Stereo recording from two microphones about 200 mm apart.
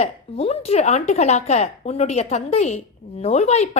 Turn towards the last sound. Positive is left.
turn(degrees=35)  # may be behind; listen again after turning